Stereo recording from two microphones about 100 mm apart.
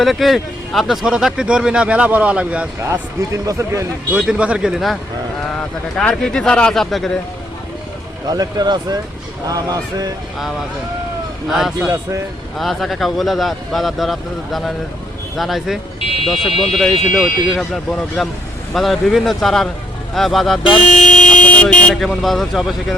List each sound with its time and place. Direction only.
0.0 s speech: centre (ahead or behind)
3.2 s speech: 30° right (ahead or behind)
4.1 s speech: 10° right (ahead or behind)
5.5 s speech: 10° left (ahead or behind)
8.3 s speech: 40° right (ahead or behind)
12.5 s speech: centre (ahead or behind)
16.5 s speech: 75° left (ahead or behind)
16.7 s speech: centre (ahead or behind)
21.2 s speech: 15° left (ahead or behind)